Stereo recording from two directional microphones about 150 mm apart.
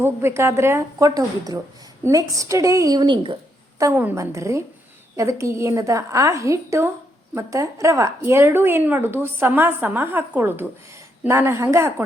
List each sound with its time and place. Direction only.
0.0 s a woman's voice: 15° right (ahead or behind)
3.8 s a woman's voice: 20° right (ahead or behind)